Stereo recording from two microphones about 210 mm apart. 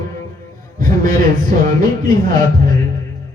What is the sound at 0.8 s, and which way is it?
A man's voice, 40° right (ahead or behind).